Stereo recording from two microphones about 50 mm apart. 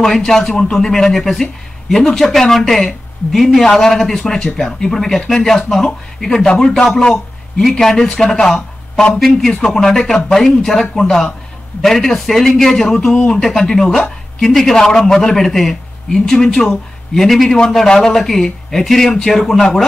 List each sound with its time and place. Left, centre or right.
0.0 s a man's voice: centre